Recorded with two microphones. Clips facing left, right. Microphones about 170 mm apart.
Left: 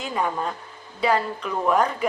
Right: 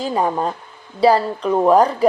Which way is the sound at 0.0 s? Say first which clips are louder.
Right 6 dB; 35° right (ahead or behind).